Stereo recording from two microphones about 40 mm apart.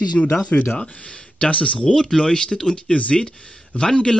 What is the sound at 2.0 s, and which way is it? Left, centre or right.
Speech, centre.